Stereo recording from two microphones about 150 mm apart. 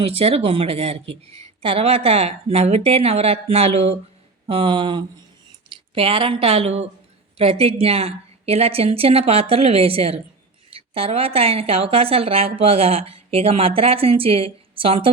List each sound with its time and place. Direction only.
0.0 s a woman's voice: 40° right (ahead or behind)